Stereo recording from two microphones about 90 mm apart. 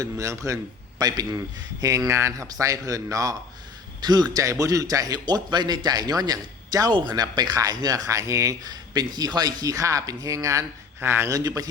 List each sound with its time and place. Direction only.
0.0 s speech: 35° right (ahead or behind)
2.0 s speech: 30° right (ahead or behind)
4.0 s speech: 50° right (ahead or behind)
4.4 s speech: 40° right (ahead or behind)
11.3 s speech: 40° right (ahead or behind)